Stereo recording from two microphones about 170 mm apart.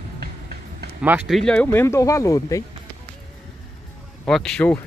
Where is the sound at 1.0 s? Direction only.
10° right (ahead or behind).